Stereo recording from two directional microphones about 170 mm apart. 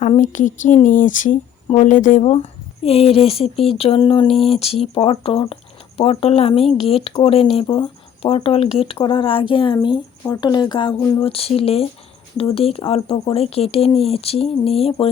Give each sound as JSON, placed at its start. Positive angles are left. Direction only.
{"t": 0.0, "sound": "speech", "side_deg": 45}
{"t": 11.2, "sound": "speech", "side_deg": 35}